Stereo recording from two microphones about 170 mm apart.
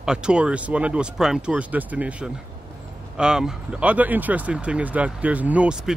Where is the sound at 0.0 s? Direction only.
5° right (ahead or behind).